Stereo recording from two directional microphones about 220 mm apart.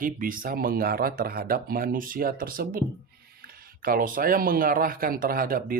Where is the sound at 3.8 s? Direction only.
40° right (ahead or behind).